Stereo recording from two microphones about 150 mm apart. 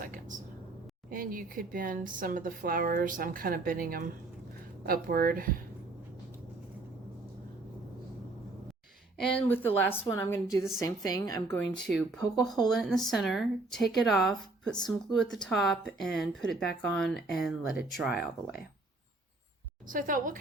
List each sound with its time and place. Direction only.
0.0 s vehicle: 60° right (ahead or behind)
1.1 s speech: 70° right (ahead or behind)
9.1 s a woman's voice: 5° left (ahead or behind); by 11.5 s 25° left (ahead or behind)
11.5 s speech: 5° left (ahead or behind)
19.9 s a woman's voice: 65° right (ahead or behind)